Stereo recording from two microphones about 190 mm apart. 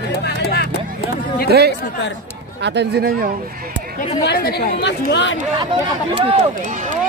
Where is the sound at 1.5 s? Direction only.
60° right (ahead or behind).